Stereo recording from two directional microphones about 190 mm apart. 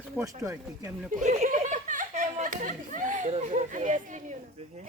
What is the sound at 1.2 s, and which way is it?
Speech, 35° right (ahead or behind).